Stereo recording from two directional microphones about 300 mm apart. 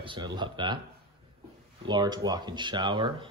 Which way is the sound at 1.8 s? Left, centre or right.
Centre.